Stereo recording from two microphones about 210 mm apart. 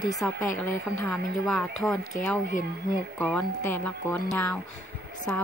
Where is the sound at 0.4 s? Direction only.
5° left (ahead or behind).